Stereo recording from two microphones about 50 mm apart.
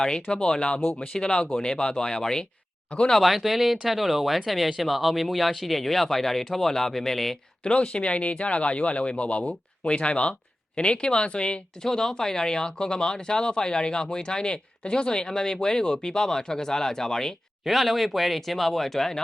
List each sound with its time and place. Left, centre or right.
0.3 s speech: centre
3.1 s speech: centre
7.6 s speech: centre
17.6 s speech: centre